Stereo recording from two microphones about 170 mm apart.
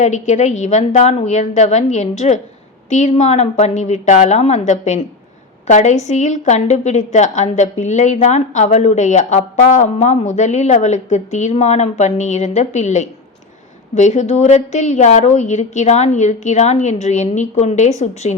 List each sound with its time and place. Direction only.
0.0 s a woman's voice: 45° left (ahead or behind)